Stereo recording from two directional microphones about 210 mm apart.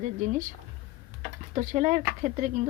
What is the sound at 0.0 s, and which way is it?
Speech, 35° right (ahead or behind).